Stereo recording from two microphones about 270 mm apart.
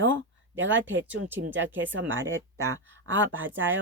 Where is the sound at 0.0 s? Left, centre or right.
Right.